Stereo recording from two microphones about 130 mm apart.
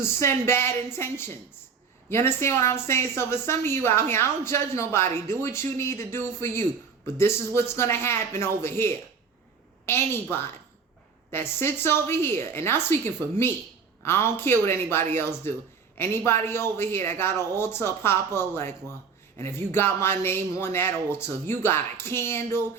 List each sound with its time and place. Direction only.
0.2 s a man's voice: 20° left (ahead or behind)